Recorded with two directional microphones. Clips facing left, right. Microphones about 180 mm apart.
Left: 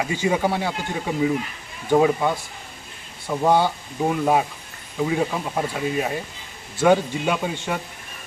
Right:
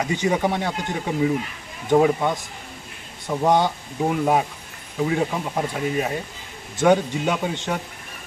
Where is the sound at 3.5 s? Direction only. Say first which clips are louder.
Even; 15° right (ahead or behind).